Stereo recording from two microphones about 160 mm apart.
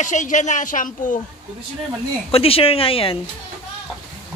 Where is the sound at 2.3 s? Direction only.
35° left (ahead or behind).